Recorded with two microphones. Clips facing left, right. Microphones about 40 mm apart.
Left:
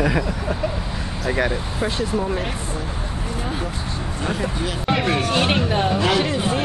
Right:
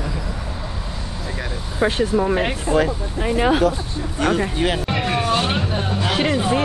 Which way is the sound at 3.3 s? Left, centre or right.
Right.